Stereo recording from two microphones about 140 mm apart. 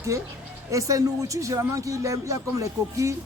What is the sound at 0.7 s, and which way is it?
Speech, 25° right (ahead or behind).